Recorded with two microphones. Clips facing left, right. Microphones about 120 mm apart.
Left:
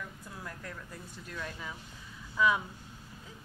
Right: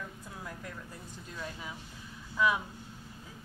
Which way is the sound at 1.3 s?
15° right (ahead or behind).